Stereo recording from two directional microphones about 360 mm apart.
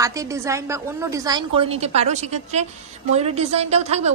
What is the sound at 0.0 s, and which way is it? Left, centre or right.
A woman's voice, centre.